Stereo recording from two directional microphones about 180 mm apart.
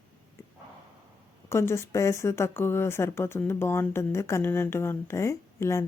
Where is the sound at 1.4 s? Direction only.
15° left (ahead or behind).